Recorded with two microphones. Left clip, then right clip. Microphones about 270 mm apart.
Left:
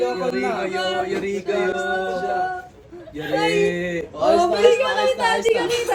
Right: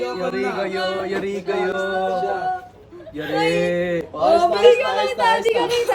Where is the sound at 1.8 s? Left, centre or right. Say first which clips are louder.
Right 2 dB; right.